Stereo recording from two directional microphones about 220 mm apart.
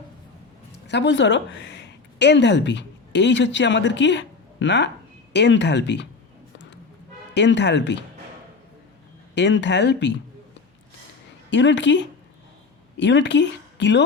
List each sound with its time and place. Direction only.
0.9 s speech: 55° left (ahead or behind)
7.3 s speech: 50° left (ahead or behind)
9.3 s speech: 50° left (ahead or behind)
11.5 s speech: 55° left (ahead or behind)